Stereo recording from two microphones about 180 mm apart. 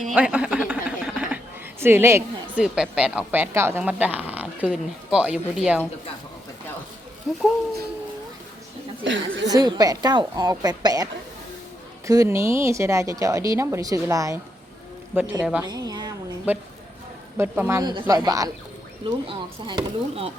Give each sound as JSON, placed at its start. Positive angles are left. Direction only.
{"t": 0.1, "sound": "a woman's voice", "side_deg": -5}
{"t": 9.0, "sound": "a woman's voice", "side_deg": -90}
{"t": 9.5, "sound": "a woman's voice", "side_deg": -20}
{"t": 15.6, "sound": "a woman's voice", "side_deg": -20}
{"t": 16.5, "sound": "a woman's voice", "side_deg": -10}